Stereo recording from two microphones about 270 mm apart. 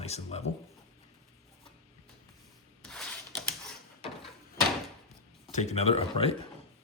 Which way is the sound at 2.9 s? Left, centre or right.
Centre.